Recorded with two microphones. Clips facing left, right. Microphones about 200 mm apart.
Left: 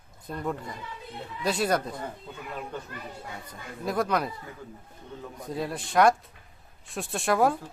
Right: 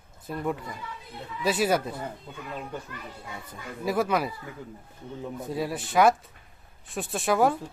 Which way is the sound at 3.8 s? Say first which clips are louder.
Right 1 dB; 5° right (ahead or behind).